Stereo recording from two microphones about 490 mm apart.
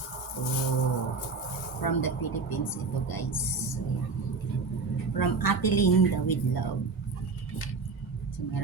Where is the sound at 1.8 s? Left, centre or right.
Left.